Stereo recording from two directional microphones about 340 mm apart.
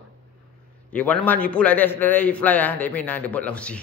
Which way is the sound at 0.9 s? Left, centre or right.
Centre.